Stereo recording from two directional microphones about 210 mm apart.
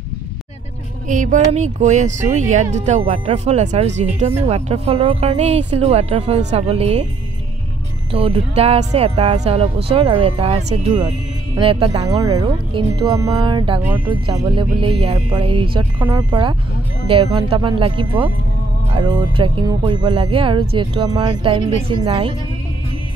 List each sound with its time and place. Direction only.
1.0 s speech: 35° right (ahead or behind)
8.1 s speech: 30° right (ahead or behind)